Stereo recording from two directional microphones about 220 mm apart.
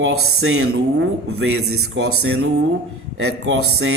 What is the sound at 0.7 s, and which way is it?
A man's voice, 65° right (ahead or behind).